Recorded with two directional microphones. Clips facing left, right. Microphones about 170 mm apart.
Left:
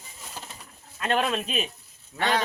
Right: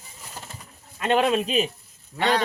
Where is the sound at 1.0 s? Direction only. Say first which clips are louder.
Right 5 dB; 15° right (ahead or behind).